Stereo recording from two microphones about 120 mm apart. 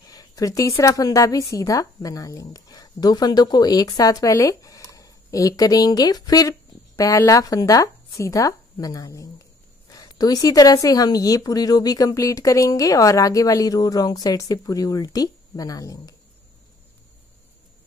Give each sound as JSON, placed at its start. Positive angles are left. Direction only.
{"t": 0.1, "sound": "a woman's voice", "side_deg": 30}